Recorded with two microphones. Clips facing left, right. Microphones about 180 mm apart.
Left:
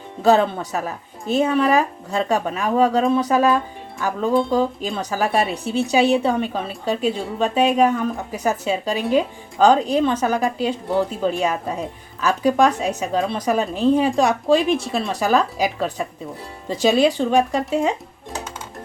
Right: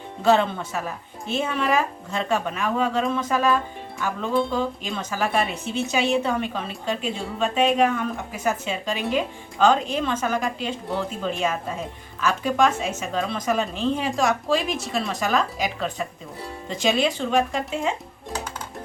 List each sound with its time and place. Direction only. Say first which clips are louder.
0.2 s a woman's voice: left 3 dB; 40° left (ahead or behind)
16.8 s a woman's voice: left 6 dB; 35° left (ahead or behind)